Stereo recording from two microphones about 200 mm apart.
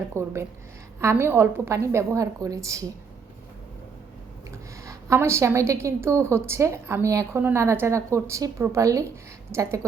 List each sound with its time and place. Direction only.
0.1 s a woman's voice: 15° right (ahead or behind)
4.9 s a woman's voice: 15° right (ahead or behind)